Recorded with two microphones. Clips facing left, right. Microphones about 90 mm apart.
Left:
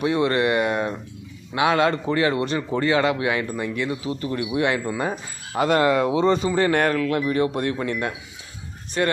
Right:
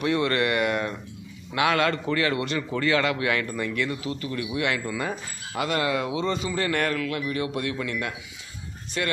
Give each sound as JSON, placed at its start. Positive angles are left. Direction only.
{"t": 0.0, "sound": "a man's voice", "side_deg": 25}